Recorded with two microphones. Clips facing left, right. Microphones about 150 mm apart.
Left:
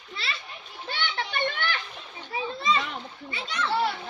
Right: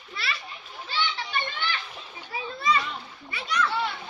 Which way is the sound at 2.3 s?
25° left (ahead or behind).